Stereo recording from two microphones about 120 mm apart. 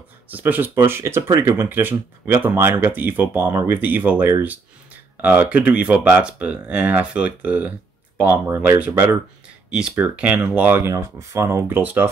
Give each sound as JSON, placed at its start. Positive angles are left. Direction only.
{"t": 0.3, "sound": "speech", "side_deg": -15}